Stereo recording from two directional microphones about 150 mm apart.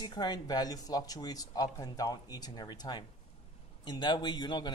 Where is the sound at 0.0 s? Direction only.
30° left (ahead or behind).